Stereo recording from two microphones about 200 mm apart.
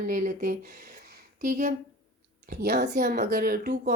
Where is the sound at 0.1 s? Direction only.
45° right (ahead or behind).